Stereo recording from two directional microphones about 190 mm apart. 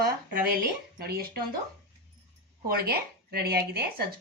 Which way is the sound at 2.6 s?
55° right (ahead or behind).